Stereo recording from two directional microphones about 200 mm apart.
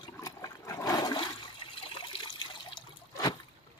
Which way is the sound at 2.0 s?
25° left (ahead or behind).